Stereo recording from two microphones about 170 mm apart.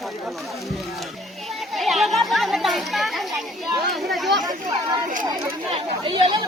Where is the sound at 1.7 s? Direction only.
Centre (ahead or behind).